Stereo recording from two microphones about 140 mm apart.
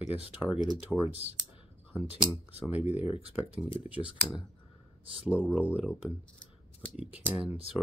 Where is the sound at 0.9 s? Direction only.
Centre (ahead or behind).